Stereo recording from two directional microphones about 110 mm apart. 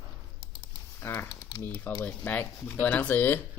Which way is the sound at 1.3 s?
40° left (ahead or behind).